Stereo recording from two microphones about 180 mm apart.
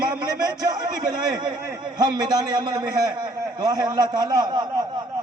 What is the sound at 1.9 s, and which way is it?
Speech, 25° right (ahead or behind).